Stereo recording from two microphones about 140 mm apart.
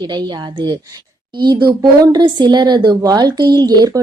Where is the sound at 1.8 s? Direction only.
30° right (ahead or behind).